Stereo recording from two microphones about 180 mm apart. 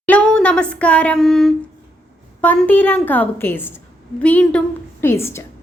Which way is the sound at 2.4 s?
10° left (ahead or behind).